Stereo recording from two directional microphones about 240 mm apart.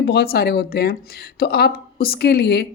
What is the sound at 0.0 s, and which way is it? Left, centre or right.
Speech, left.